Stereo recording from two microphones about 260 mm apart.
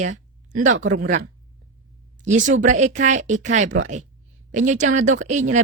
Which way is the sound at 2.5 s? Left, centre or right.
Right.